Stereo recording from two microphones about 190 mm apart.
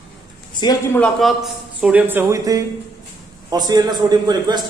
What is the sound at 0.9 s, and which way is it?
A man's voice, 5° left (ahead or behind).